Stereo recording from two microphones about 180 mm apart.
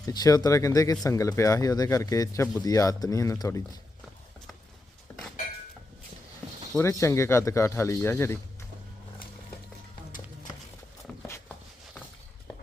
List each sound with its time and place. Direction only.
0.0 s speech: 20° left (ahead or behind)
6.7 s speech: 15° left (ahead or behind)
11.0 s a sound: 10° left (ahead or behind)